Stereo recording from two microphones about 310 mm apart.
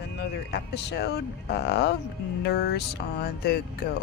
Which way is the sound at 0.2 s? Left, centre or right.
Left.